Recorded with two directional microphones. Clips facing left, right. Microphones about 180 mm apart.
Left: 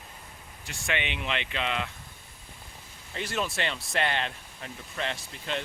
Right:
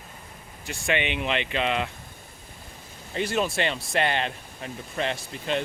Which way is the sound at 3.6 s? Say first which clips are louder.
Right 4 dB; 15° right (ahead or behind).